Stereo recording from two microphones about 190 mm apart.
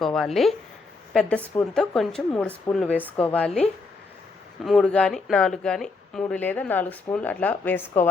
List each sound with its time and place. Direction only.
0.0 s a woman's voice: centre (ahead or behind)
4.6 s speech: 5° left (ahead or behind)